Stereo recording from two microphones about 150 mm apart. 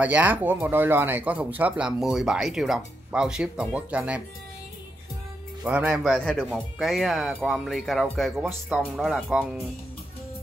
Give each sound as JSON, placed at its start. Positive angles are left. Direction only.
{"t": 0.0, "sound": "speech", "side_deg": -10}
{"t": 5.6, "sound": "speech", "side_deg": -10}
{"t": 6.1, "sound": "speech", "side_deg": 5}